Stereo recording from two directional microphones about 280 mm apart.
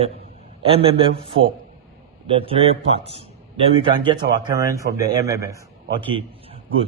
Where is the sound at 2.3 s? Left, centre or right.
Centre.